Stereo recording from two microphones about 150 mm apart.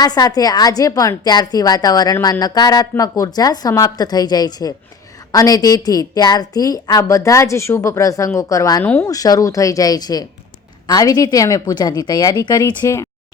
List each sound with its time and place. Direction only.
0.0 s a woman's voice: 25° left (ahead or behind)
8.8 s speech: 10° left (ahead or behind)
9.0 s a woman's voice: 25° left (ahead or behind)